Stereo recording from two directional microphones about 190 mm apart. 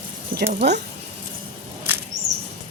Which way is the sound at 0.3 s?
45° right (ahead or behind).